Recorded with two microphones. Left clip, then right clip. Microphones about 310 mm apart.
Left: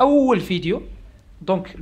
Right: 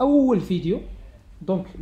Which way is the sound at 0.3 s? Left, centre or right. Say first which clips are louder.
Left 3 dB; left.